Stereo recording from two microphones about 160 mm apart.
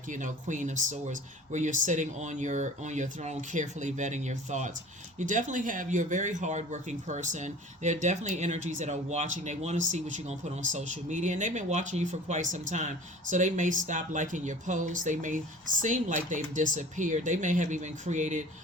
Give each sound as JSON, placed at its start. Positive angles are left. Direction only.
{"t": 0.1, "sound": "speech", "side_deg": -50}